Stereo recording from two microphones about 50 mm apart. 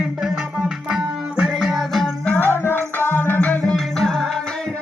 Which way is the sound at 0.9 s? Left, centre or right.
Centre.